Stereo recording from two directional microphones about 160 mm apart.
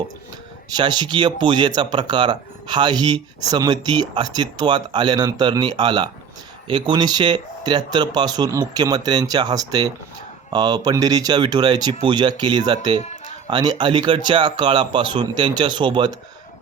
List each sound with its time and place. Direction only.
0.8 s speech: 25° right (ahead or behind)